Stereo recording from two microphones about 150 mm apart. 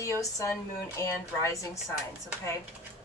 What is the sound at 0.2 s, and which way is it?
A woman's voice, 20° left (ahead or behind).